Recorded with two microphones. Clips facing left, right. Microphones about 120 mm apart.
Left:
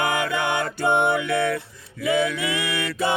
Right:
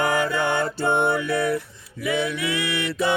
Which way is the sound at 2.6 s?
25° right (ahead or behind).